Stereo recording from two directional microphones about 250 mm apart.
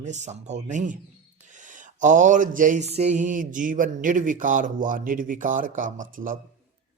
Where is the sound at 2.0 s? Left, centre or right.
Right.